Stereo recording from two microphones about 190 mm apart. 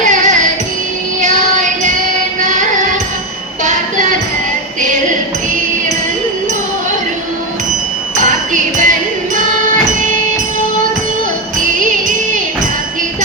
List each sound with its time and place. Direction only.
0.0 s music: 40° right (ahead or behind)
8.1 s music: 40° right (ahead or behind)